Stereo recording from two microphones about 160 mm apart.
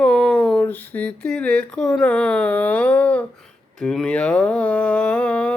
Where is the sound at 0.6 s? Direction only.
10° left (ahead or behind).